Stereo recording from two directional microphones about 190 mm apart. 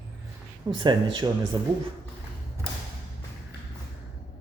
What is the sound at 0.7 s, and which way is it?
Speech, 25° right (ahead or behind).